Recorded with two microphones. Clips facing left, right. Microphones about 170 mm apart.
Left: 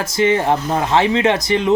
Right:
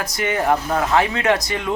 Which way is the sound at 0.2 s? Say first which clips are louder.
Left 4 dB; 25° left (ahead or behind).